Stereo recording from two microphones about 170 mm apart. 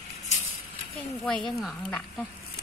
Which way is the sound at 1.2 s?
Centre (ahead or behind).